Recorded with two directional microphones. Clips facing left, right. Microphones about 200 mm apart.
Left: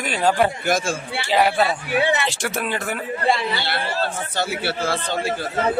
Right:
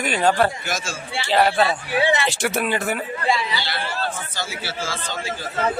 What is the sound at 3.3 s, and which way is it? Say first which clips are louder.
Speech: left 2 dB; 55° left (ahead or behind).